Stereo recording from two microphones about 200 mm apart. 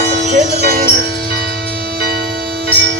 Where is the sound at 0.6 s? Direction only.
50° right (ahead or behind).